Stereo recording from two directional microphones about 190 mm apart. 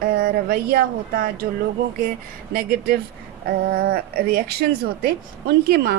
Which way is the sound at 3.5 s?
55° right (ahead or behind).